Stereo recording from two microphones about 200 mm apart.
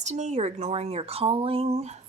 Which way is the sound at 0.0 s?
35° right (ahead or behind).